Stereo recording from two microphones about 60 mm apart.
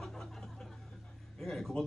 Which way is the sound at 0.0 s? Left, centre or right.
Centre.